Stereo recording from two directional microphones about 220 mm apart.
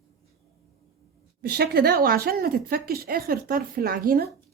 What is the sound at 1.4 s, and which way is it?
A woman's voice, 45° right (ahead or behind).